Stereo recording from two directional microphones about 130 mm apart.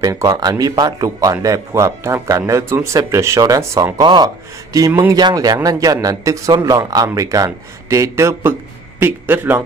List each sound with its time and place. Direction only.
0.0 s a man's voice: 25° right (ahead or behind)
4.0 s speech: 35° right (ahead or behind)
4.7 s a man's voice: 25° right (ahead or behind)